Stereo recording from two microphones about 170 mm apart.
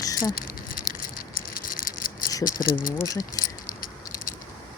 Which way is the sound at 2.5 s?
55° left (ahead or behind).